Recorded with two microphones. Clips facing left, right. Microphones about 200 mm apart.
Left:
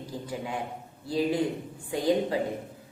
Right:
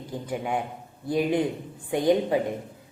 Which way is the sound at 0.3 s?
20° right (ahead or behind).